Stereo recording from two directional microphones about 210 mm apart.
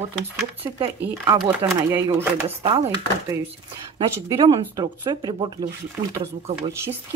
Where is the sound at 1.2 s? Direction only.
15° right (ahead or behind).